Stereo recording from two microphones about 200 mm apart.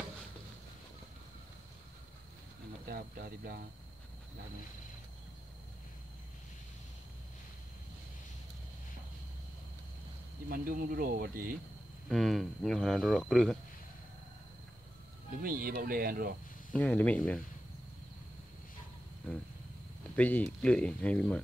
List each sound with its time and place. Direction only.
2.9 s speech: 45° right (ahead or behind)
10.5 s speech: 45° right (ahead or behind)
12.1 s speech: centre (ahead or behind)
15.4 s speech: 45° right (ahead or behind)
16.7 s speech: 5° left (ahead or behind)
20.2 s speech: 10° left (ahead or behind)